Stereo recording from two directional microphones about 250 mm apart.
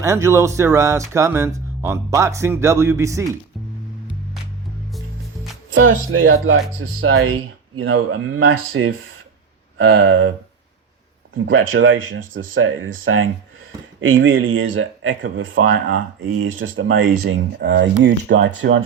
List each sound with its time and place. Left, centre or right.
0.0 s speech: centre
5.7 s speech: right
11.4 s speech: right